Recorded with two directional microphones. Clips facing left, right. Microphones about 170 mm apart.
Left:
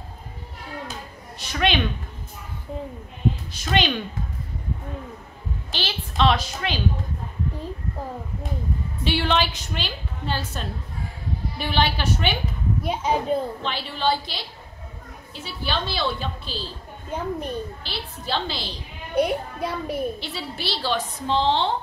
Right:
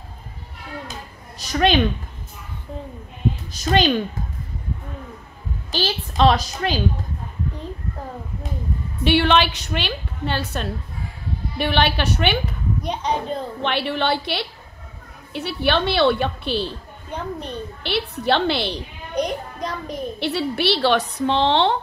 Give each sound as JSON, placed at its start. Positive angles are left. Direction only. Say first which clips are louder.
{"t": 1.4, "sound": "a woman's voice", "louder": "right 5 dB", "side_deg": -40}
{"t": 3.5, "sound": "a woman's voice", "louder": "right 8 dB", "side_deg": -40}
{"t": 5.7, "sound": "a woman's voice", "louder": "right 7 dB", "side_deg": -40}
{"t": 9.0, "sound": "a woman's voice", "louder": "right 6 dB", "side_deg": -65}
{"t": 12.8, "sound": "a child's voice", "louder": "left 1 dB", "side_deg": 5}
{"t": 13.6, "sound": "a woman's voice", "louder": "right 7 dB", "side_deg": -65}
{"t": 17.1, "sound": "a child's voice", "louder": "left 1 dB", "side_deg": 10}
{"t": 17.8, "sound": "a woman's voice", "louder": "right 10 dB", "side_deg": -65}
{"t": 19.1, "sound": "a child's voice", "louder": "left 2 dB", "side_deg": 5}
{"t": 20.2, "sound": "a woman's voice", "louder": "right 10 dB", "side_deg": -65}